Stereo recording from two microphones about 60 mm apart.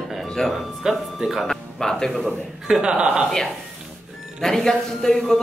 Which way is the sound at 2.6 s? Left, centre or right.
Centre.